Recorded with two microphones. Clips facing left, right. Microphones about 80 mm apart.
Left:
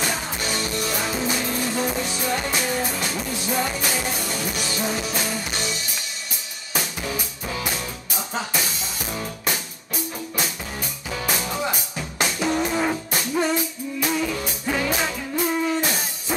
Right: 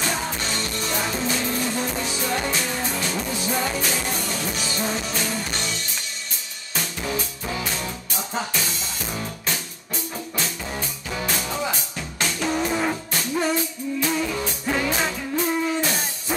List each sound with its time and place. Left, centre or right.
0.1 s music: centre
11.2 s music: centre